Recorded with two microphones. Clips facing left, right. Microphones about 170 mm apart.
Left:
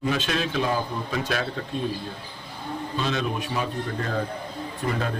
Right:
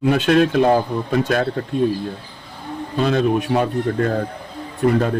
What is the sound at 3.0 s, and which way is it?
Speech, 55° right (ahead or behind).